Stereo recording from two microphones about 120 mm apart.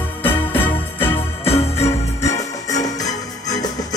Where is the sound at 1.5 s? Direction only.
60° left (ahead or behind).